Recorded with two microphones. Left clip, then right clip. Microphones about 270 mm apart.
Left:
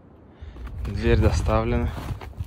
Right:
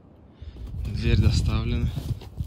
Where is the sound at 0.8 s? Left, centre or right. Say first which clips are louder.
Left 7 dB; centre.